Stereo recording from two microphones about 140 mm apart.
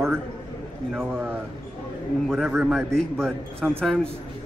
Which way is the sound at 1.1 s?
10° right (ahead or behind).